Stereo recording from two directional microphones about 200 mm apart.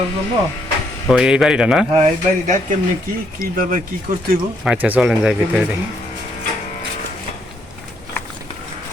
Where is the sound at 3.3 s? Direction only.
45° right (ahead or behind).